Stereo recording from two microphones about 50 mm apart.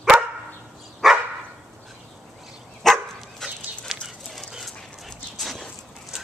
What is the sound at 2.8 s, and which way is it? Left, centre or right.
Dog, centre.